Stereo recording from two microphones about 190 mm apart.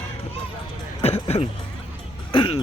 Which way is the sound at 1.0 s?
35° left (ahead or behind).